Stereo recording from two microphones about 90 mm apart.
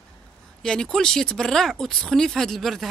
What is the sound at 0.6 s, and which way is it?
Speech, 5° left (ahead or behind).